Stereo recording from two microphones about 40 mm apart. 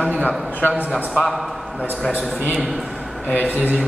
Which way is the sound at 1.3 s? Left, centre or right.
Centre.